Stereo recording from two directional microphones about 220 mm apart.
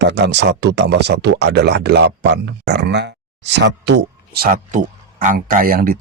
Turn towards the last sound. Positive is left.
turn(degrees=-40)  # may be behind; listen again after turning